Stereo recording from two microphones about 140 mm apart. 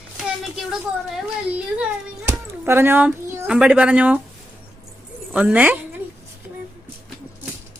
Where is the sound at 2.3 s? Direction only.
15° right (ahead or behind).